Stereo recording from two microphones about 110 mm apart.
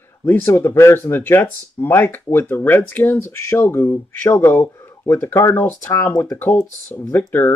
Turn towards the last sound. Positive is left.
turn(degrees=20)  # may be behind; listen again after turning